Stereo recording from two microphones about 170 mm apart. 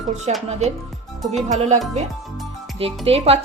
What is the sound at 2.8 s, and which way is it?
Speech, 35° right (ahead or behind).